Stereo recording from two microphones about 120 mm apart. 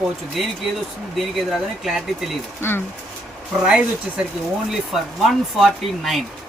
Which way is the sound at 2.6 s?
20° left (ahead or behind).